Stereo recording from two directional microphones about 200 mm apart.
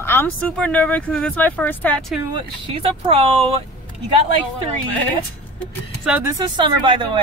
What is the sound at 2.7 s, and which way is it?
Speech, 30° right (ahead or behind).